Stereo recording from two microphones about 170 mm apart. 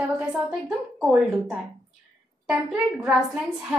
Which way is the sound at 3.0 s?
5° right (ahead or behind).